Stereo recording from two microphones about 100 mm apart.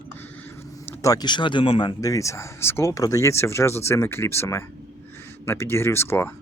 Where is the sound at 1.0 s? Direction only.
45° left (ahead or behind).